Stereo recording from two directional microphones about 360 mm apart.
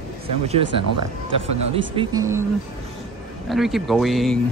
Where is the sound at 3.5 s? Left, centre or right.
Centre.